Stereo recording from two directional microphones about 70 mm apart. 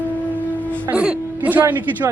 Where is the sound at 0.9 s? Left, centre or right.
Centre.